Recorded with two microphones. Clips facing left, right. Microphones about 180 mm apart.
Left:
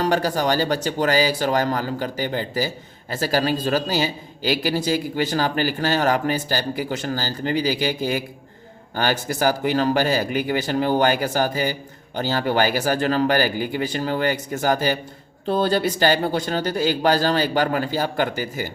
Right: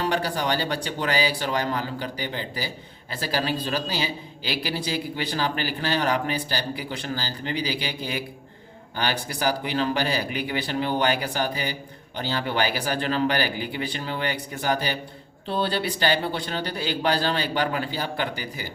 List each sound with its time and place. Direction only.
0.0 s speech: 45° left (ahead or behind)